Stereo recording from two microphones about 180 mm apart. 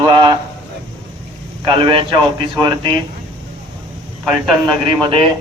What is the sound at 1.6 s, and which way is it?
A man's voice, 30° right (ahead or behind).